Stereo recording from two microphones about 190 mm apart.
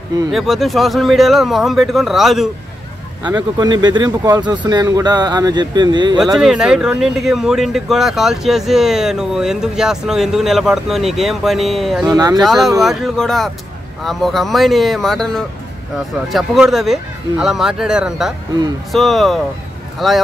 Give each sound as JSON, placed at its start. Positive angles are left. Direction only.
{"t": 0.3, "sound": "speech", "side_deg": 0}
{"t": 3.3, "sound": "speech", "side_deg": -20}
{"t": 6.4, "sound": "speech", "side_deg": -5}
{"t": 12.1, "sound": "speech", "side_deg": -20}
{"t": 12.4, "sound": "speech", "side_deg": 0}